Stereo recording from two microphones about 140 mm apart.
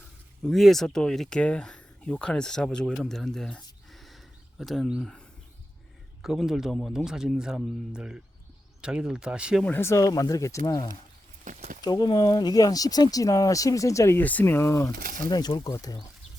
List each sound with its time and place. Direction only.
0.4 s speech: centre (ahead or behind)
6.2 s speech: 5° right (ahead or behind)
9.6 s speech: 15° left (ahead or behind)
11.4 s speech: 60° right (ahead or behind)
11.8 s speech: 30° left (ahead or behind)
15.3 s speech: 30° left (ahead or behind)